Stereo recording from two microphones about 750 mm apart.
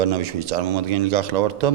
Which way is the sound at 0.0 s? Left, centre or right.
Right.